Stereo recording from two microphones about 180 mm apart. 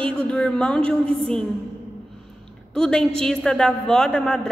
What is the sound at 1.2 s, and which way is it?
Speech, 5° left (ahead or behind).